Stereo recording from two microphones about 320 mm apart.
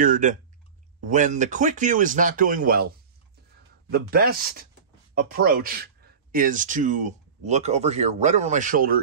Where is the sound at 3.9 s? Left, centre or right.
Right.